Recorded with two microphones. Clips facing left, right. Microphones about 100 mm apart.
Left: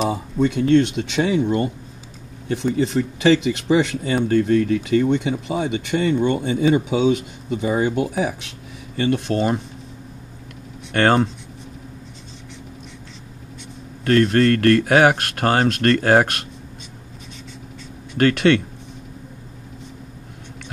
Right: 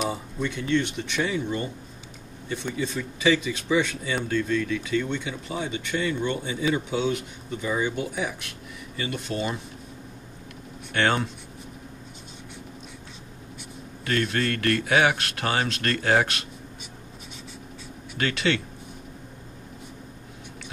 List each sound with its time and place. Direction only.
0.4 s speech: 60° left (ahead or behind)
2.7 s speech: 75° left (ahead or behind)
4.4 s speech: 65° left (ahead or behind); by 8.4 s 85° left
8.9 s speech: 65° left (ahead or behind)
10.9 s speech: 45° left (ahead or behind)
14.0 s speech: 50° left (ahead or behind)
18.1 s speech: 50° left (ahead or behind)